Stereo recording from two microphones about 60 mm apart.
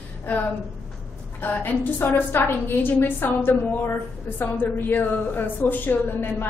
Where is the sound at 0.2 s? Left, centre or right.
Left.